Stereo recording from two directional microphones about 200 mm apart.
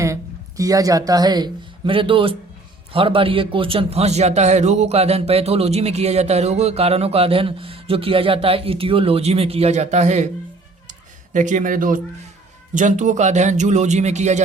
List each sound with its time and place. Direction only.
0.0 s a man's voice: 15° right (ahead or behind); by 10.2 s 35° right (ahead or behind)
11.3 s a man's voice: 40° right (ahead or behind)